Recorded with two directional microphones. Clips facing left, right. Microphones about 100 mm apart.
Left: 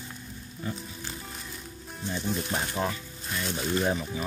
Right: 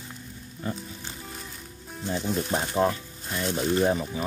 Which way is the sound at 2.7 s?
30° right (ahead or behind).